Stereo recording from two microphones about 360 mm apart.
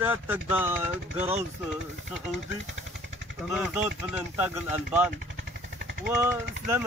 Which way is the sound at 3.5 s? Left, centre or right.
Centre.